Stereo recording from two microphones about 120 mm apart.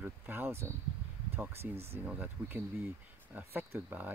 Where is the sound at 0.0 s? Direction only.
15° right (ahead or behind).